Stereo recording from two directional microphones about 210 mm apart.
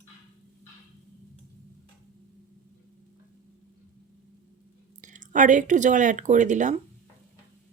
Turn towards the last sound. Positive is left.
turn(degrees=-35)  # may be behind; listen again after turning